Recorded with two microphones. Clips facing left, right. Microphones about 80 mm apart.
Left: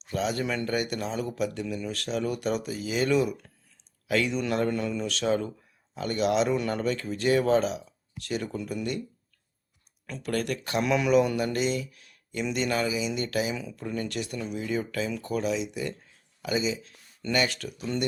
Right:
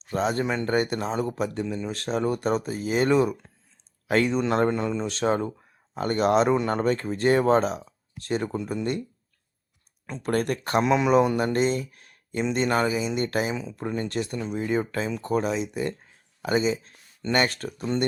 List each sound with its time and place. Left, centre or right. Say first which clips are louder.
0.1 s speech: right 3 dB; right
10.1 s speech: right 4 dB; right
10.8 s speech: right 2 dB; right